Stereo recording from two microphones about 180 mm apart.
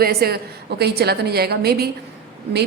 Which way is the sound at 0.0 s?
60° right (ahead or behind).